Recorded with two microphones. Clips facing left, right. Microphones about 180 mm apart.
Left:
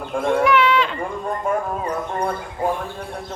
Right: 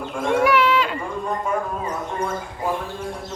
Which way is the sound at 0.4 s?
5° right (ahead or behind).